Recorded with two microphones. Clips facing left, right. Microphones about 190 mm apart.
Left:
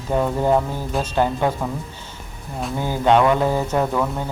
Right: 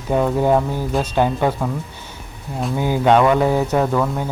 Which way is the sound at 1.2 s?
15° right (ahead or behind).